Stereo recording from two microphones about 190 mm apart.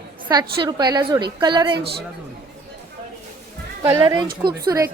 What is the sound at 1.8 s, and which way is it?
Speech, 60° right (ahead or behind).